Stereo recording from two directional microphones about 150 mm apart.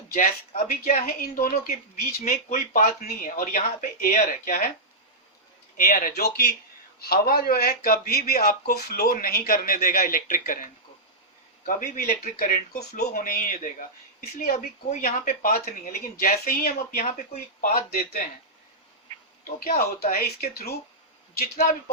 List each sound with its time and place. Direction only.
0.1 s a woman's voice: 70° left (ahead or behind)
5.7 s speech: 65° left (ahead or behind)
14.8 s speech: 60° left (ahead or behind); by 18.2 s 75° left (ahead or behind)
19.6 s speech: 75° left (ahead or behind)